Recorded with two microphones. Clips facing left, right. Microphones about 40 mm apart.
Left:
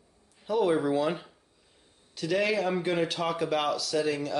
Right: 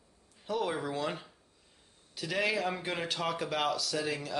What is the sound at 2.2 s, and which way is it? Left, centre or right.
Speech, centre.